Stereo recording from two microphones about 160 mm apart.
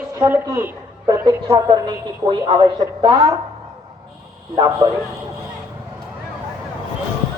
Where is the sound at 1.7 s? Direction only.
30° right (ahead or behind).